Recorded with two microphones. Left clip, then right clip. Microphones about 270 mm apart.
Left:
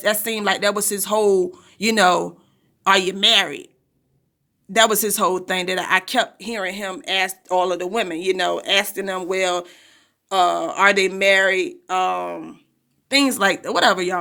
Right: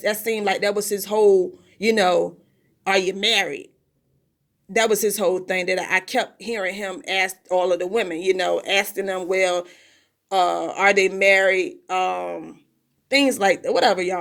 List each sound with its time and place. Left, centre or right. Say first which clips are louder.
0.0 s speech: left 2 dB; left
4.7 s speech: left 2 dB; left